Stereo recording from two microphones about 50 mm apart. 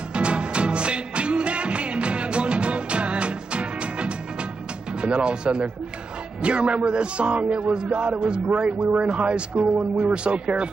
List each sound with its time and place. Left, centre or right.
0.1 s music: right
5.0 s a man's voice: right